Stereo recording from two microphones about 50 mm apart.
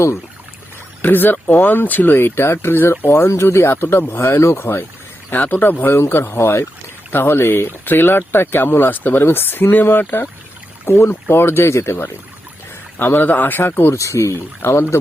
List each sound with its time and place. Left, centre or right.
1.0 s speech: left
3.1 s speech: left
4.2 s speech: left
4.6 s speech: left
5.3 s speech: left
6.1 s speech: left
13.9 s speech: left
14.7 s speech: left